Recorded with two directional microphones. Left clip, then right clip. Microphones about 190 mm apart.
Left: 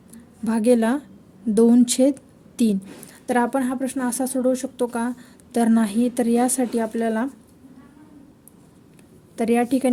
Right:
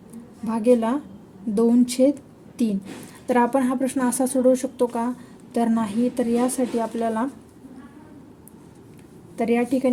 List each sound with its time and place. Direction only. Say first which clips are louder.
0.4 s speech: left 1 dB; 45° left (ahead or behind)
3.2 s a woman's voice: right 1 dB; 30° left (ahead or behind)
9.3 s a woman's voice: left 1 dB; 35° left (ahead or behind)